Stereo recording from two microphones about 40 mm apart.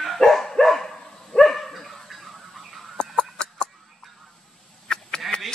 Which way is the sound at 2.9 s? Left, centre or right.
Left.